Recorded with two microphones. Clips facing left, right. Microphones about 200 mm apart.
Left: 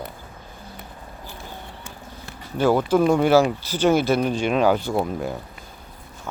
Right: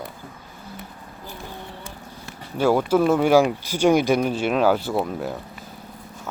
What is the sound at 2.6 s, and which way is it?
Speech, 10° right (ahead or behind).